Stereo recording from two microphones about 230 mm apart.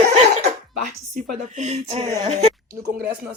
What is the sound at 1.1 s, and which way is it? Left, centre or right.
A woman's voice, right.